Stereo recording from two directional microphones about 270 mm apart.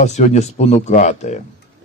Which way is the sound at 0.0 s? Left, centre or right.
Left.